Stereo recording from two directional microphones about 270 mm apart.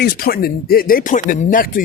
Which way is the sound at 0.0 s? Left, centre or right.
Left.